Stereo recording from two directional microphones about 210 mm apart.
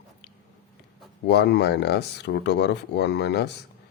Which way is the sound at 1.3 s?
50° left (ahead or behind).